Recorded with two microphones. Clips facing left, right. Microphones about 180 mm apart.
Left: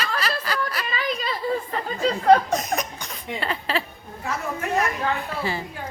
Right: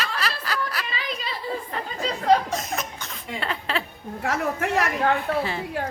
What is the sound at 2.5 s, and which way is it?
Speech, 15° left (ahead or behind).